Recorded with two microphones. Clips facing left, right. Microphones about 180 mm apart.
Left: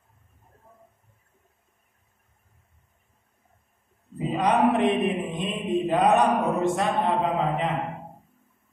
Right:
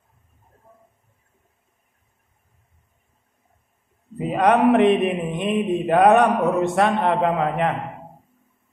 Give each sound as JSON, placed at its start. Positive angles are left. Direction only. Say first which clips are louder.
{"t": 4.2, "sound": "mantra", "louder": "right 4 dB", "side_deg": -60}